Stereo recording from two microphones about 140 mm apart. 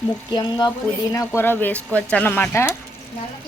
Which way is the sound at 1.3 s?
15° left (ahead or behind).